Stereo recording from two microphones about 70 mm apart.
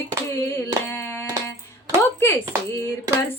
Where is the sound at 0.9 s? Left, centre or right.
Left.